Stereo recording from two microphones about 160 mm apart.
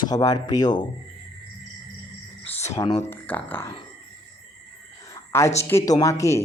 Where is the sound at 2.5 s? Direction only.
45° left (ahead or behind).